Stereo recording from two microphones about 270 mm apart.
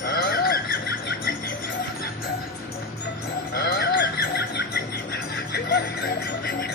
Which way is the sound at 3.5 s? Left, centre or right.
Left.